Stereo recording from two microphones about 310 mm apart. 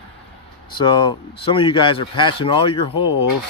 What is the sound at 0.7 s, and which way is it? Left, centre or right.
Speech, centre.